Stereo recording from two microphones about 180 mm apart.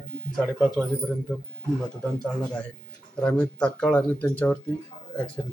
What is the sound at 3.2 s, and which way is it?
Speech, 5° left (ahead or behind).